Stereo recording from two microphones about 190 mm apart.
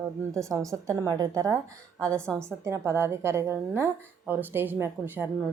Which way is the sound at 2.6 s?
15° right (ahead or behind).